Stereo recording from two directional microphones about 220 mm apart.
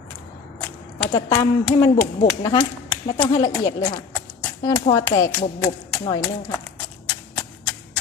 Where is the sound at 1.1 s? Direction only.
15° left (ahead or behind).